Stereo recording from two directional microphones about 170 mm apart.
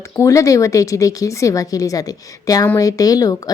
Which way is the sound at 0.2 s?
20° left (ahead or behind).